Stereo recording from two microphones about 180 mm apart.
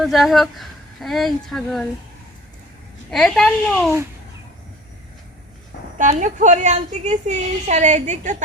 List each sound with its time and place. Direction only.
0.0 s a woman's voice: centre (ahead or behind)
3.1 s a woman's voice: 5° left (ahead or behind)
6.0 s a woman's voice: 45° right (ahead or behind)